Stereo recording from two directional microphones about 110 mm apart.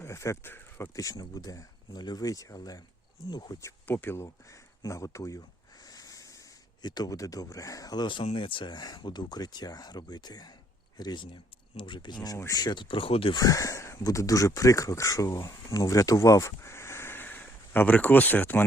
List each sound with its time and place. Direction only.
0.0 s speech: 25° left (ahead or behind)
1.1 s speech: 35° left (ahead or behind)
3.6 s speech: 25° left (ahead or behind); by 13.3 s 55° left (ahead or behind)
13.3 s speech: 30° left (ahead or behind); by 18.6 s 15° left (ahead or behind)